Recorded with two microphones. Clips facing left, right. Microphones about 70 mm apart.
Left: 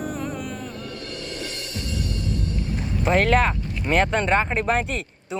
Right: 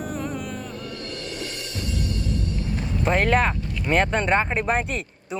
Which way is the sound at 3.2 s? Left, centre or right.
Centre.